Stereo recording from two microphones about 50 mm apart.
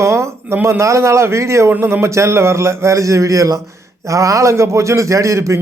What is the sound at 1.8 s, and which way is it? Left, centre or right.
A man's voice, right.